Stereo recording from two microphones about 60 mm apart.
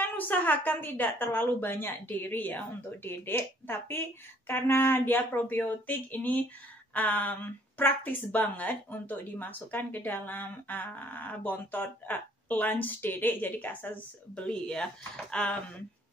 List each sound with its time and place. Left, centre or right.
0.0 s a woman's voice: left